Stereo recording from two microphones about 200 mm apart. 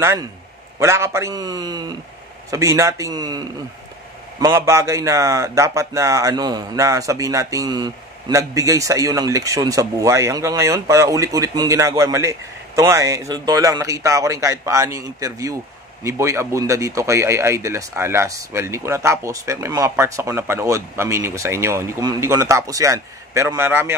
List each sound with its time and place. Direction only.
0.0 s a man's voice: 15° right (ahead or behind)